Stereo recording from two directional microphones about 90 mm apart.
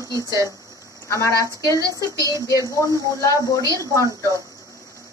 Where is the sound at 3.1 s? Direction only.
35° left (ahead or behind).